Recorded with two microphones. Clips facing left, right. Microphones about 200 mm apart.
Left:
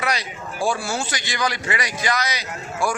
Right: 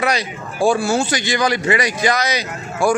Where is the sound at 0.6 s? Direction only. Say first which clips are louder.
Right 8 dB; 55° right (ahead or behind).